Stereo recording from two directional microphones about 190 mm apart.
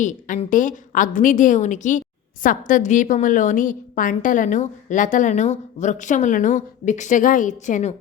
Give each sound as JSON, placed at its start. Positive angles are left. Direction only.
{"t": 0.0, "sound": "a woman's voice", "side_deg": 40}